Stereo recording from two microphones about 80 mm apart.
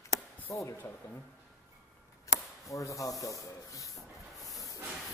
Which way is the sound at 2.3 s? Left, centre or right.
Left.